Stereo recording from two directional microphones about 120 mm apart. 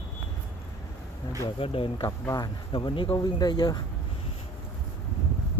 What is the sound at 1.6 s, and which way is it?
Speech, 50° left (ahead or behind).